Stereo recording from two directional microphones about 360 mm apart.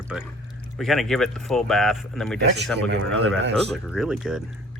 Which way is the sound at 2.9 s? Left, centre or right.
Right.